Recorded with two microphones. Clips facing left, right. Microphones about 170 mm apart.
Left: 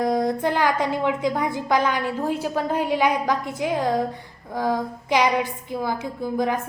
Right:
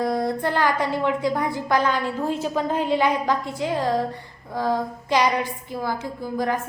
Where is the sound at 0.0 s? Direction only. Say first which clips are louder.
Left 2 dB; 15° left (ahead or behind).